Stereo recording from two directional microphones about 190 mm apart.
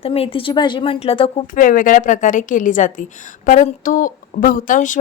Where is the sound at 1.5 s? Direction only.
45° left (ahead or behind).